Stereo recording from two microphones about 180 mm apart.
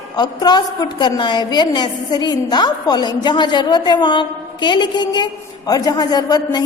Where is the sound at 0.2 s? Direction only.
25° left (ahead or behind).